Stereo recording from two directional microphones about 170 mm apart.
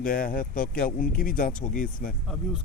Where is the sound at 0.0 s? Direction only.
55° left (ahead or behind).